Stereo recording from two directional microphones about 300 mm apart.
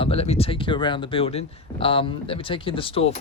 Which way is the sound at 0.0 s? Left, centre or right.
Centre.